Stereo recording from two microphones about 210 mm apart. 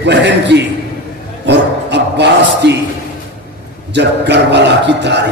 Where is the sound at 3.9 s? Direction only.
55° right (ahead or behind).